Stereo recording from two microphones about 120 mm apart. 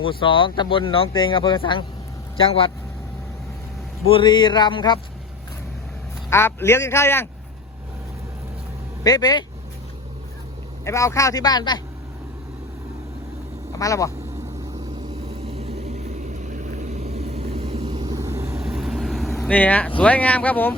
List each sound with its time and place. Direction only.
0.0 s speech: 45° left (ahead or behind)
4.1 s speech: 40° left (ahead or behind)
6.3 s a man's voice: 20° left (ahead or behind)
9.0 s speech: 35° left (ahead or behind)
10.8 s a man's voice: 25° left (ahead or behind)
13.7 s a man's voice: 30° left (ahead or behind)
15.5 s vehicle: 60° right (ahead or behind)
18.0 s vehicle: 30° right (ahead or behind)
18.5 s vehicle: 5° right (ahead or behind)
19.5 s speech: 10° left (ahead or behind)